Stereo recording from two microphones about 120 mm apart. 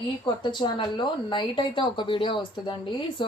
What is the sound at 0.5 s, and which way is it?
Speech, 40° left (ahead or behind).